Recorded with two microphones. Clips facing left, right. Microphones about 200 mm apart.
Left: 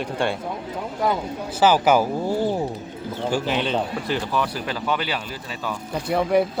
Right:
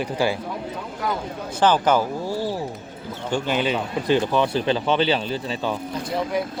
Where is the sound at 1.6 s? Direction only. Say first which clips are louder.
Left 1 dB; 10° left (ahead or behind).